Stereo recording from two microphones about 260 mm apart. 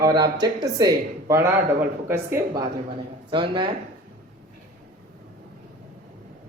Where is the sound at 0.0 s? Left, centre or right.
Centre.